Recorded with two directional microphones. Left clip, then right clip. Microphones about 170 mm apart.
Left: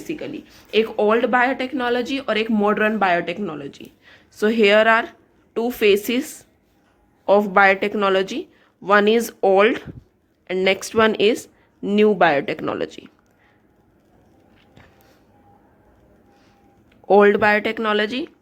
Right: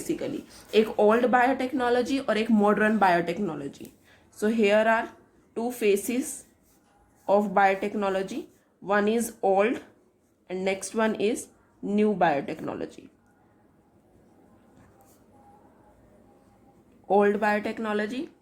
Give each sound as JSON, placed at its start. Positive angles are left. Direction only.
{"t": 0.0, "sound": "speech", "side_deg": 10}
{"t": 17.1, "sound": "speech", "side_deg": 35}